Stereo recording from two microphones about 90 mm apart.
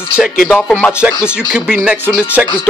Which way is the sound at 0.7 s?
10° left (ahead or behind).